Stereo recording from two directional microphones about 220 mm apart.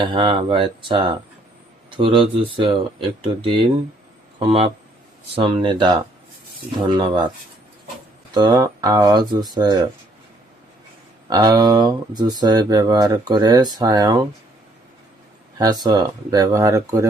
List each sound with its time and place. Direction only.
0.0 s speech: 20° right (ahead or behind)
8.3 s speech: 20° right (ahead or behind)
11.3 s speech: 20° right (ahead or behind)
15.5 s speech: 20° right (ahead or behind)